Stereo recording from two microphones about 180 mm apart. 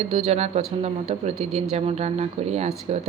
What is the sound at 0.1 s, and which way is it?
Speech, 35° right (ahead or behind).